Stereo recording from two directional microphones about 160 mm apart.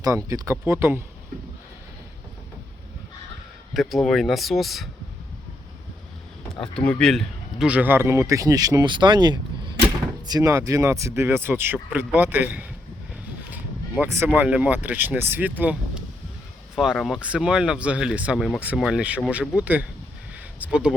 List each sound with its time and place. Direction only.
0.3 s speech: 20° right (ahead or behind)
3.8 s speech: centre (ahead or behind)
6.6 s speech: 5° left (ahead or behind); by 12.6 s 10° right (ahead or behind)
13.5 s a sound: 10° right (ahead or behind)
14.3 s speech: 10° right (ahead or behind)
16.7 s speech: centre (ahead or behind)
20.3 s a sound: 5° right (ahead or behind)